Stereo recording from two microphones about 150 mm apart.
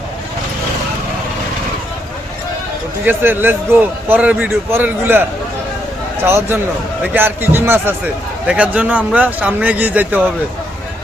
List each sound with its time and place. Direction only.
3.1 s a man's voice: 15° right (ahead or behind)
6.2 s a man's voice: 15° right (ahead or behind)